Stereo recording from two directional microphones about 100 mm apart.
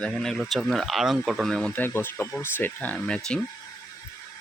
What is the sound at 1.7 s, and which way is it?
Speech, 20° left (ahead or behind).